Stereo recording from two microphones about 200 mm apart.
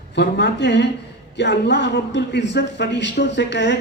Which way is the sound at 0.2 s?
60° left (ahead or behind).